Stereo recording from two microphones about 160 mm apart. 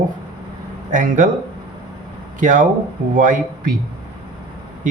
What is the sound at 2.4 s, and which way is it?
Speech, 55° right (ahead or behind).